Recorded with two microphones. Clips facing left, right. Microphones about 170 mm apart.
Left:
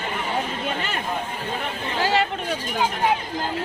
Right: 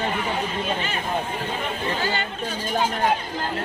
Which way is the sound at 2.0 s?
90° left.